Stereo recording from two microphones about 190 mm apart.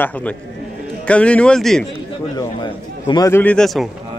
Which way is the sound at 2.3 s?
20° left (ahead or behind).